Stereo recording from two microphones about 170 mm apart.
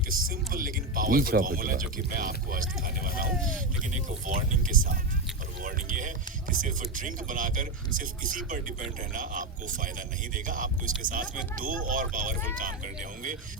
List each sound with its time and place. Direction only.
0.1 s music: 55° right (ahead or behind)
4.3 s speech: 55° right (ahead or behind)